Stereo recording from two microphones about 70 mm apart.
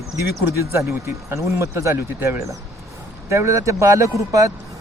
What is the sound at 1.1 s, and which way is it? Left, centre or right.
Speech, right.